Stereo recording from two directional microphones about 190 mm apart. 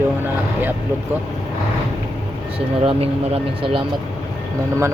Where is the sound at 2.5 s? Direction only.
30° right (ahead or behind).